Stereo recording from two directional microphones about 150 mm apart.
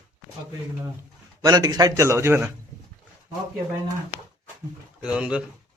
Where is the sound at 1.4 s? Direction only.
25° right (ahead or behind).